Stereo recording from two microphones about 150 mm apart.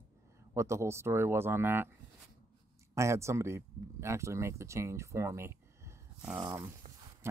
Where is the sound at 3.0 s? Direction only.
20° right (ahead or behind).